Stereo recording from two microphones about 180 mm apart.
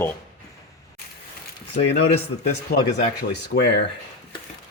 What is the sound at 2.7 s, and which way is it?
Speech, 55° left (ahead or behind).